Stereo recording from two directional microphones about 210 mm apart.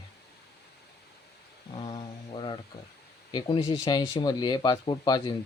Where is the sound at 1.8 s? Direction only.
20° left (ahead or behind).